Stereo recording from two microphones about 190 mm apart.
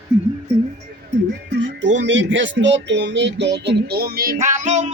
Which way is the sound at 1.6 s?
70° right (ahead or behind).